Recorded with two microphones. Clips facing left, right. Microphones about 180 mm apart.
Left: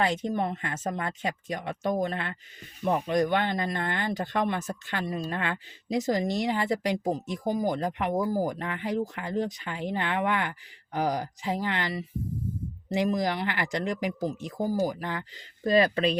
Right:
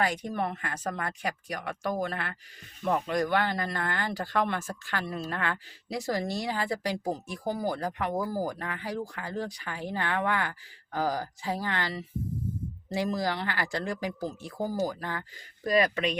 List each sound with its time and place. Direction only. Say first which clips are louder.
0.0 s speech: left 2 dB; 25° left (ahead or behind)
15.6 s speech: left 3 dB; 30° left (ahead or behind)